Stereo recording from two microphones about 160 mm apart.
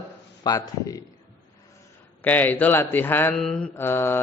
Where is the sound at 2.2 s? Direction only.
10° left (ahead or behind).